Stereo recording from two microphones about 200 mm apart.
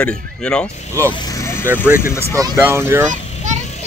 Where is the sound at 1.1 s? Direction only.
20° left (ahead or behind).